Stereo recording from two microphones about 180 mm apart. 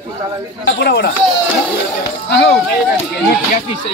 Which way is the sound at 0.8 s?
65° left (ahead or behind).